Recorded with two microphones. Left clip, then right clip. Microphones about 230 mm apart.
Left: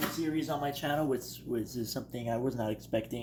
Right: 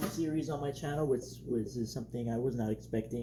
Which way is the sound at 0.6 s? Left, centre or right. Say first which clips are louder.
Left 1 dB; left.